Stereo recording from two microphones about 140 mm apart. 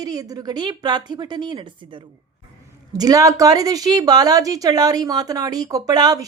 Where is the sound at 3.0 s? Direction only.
25° right (ahead or behind).